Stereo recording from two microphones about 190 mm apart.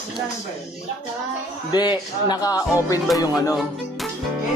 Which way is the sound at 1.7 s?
20° left (ahead or behind).